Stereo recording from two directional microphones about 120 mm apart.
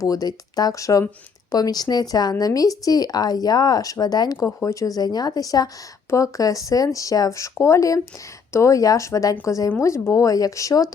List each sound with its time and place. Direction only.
0.0 s speech: 30° left (ahead or behind)